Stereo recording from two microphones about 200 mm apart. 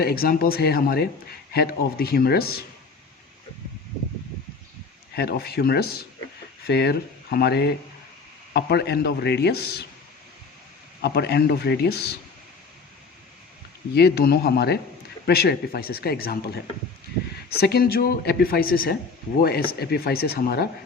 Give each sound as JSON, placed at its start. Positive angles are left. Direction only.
{"t": 0.0, "sound": "speech", "side_deg": 50}
{"t": 5.1, "sound": "speech", "side_deg": 50}
{"t": 11.0, "sound": "speech", "side_deg": 55}
{"t": 13.9, "sound": "speech", "side_deg": 55}